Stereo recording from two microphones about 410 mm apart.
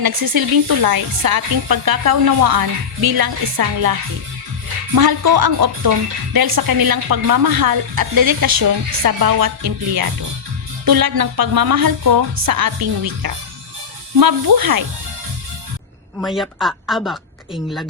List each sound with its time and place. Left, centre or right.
0.0 s a woman's voice: right
4.9 s a woman's voice: right
16.2 s speech: centre